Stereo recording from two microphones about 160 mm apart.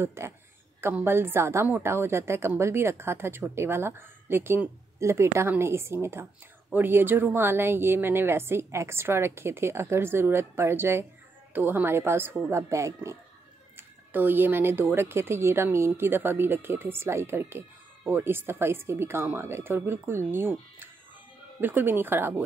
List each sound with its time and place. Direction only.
0.0 s a woman's voice: 15° right (ahead or behind)